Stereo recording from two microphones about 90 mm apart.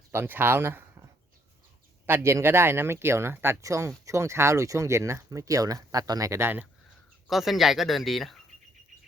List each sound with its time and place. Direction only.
0.1 s speech: 25° right (ahead or behind)
2.0 s speech: 30° right (ahead or behind)
6.4 s speech: 20° right (ahead or behind)
7.3 s speech: centre (ahead or behind)